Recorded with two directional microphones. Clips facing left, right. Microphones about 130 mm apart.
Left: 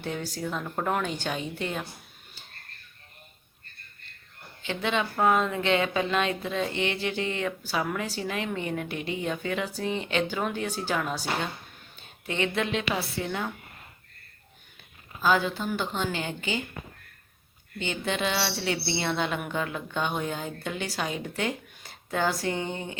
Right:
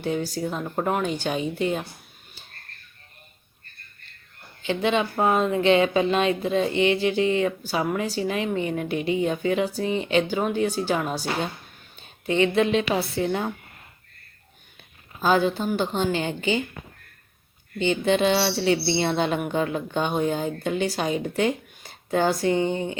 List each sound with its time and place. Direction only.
0.4 s a woman's voice: 20° right (ahead or behind)
4.6 s speech: 20° right (ahead or behind)
12.3 s speech: 20° right (ahead or behind)
15.2 s speech: 25° right (ahead or behind)
17.7 s speech: 20° right (ahead or behind)